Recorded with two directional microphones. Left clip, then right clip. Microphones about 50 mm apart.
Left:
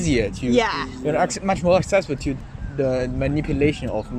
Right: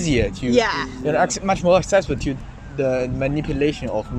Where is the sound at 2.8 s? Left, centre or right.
Left.